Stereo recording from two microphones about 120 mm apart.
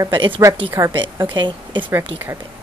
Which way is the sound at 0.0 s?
40° right (ahead or behind).